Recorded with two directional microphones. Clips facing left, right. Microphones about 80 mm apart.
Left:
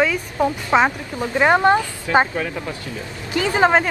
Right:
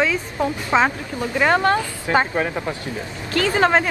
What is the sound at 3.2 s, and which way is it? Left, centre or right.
Speech, centre.